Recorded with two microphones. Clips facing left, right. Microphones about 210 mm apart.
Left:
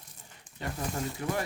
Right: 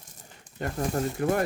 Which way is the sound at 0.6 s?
50° right (ahead or behind).